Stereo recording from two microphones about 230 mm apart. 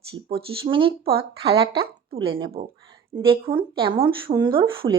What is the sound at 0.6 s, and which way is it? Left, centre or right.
Speech, right.